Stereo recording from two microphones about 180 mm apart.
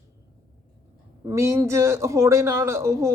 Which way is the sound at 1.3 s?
15° right (ahead or behind).